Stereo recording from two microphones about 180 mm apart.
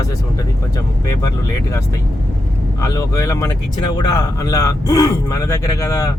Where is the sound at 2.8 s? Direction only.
20° left (ahead or behind).